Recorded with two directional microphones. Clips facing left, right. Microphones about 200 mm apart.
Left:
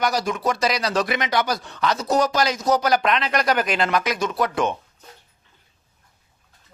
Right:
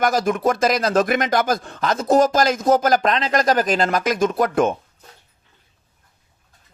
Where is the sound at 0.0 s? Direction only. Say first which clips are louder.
Right 4 dB; 50° right (ahead or behind).